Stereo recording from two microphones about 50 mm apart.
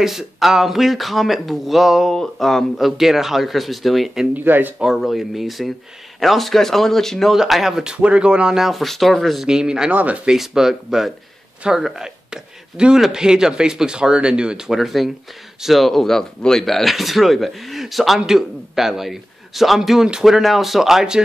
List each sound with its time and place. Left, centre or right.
0.0 s speech: centre
2.0 s speech: centre
3.0 s speech: centre
4.3 s speech: right
4.9 s speech: centre
7.3 s speech: centre
7.8 s speech: right; by 9.4 s centre
9.4 s speech: centre
9.8 s speech: right
10.3 s speech: centre
14.7 s speech: centre